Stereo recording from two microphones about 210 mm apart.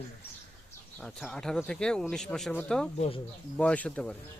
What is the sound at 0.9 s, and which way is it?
Speech, 5° left (ahead or behind).